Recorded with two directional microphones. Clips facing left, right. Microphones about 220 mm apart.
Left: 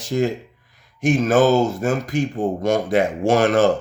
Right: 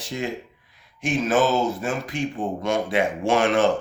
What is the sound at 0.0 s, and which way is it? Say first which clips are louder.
Speech: left 8 dB; 45° left (ahead or behind).